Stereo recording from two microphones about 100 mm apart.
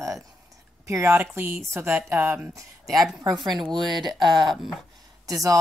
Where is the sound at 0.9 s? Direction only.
20° right (ahead or behind).